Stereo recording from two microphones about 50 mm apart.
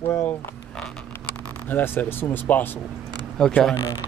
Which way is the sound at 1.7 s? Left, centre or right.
Left.